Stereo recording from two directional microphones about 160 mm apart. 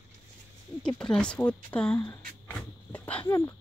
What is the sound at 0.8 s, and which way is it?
Speech, 5° left (ahead or behind).